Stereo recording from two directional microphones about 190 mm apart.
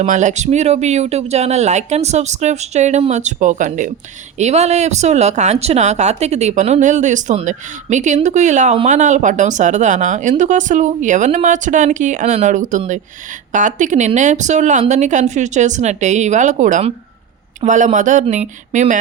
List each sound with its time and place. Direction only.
0.0 s speech: 40° right (ahead or behind)